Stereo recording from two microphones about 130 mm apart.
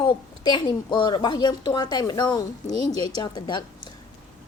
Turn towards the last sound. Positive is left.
turn(degrees=35)  # may be behind; listen again after turning